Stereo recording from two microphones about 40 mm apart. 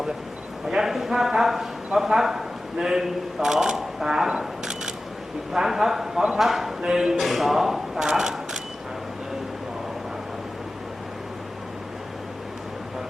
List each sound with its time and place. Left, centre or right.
0.7 s a man's voice: centre
6.8 s a man's voice: centre
7.2 s a man's voice: centre